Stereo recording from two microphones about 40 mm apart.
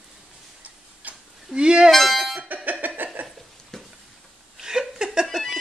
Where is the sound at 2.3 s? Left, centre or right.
Right.